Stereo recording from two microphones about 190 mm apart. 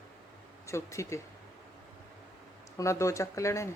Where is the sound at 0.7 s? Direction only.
15° left (ahead or behind).